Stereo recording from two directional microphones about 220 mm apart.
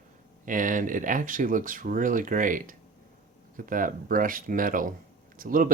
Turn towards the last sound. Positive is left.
turn(degrees=-40)  # may be behind; listen again after turning